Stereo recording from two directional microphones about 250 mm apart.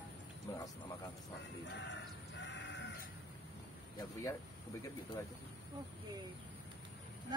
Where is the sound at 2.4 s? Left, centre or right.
Left.